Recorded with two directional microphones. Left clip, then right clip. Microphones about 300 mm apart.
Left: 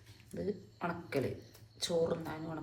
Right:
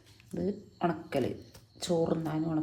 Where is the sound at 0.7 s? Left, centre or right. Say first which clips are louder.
Right 7 dB; right.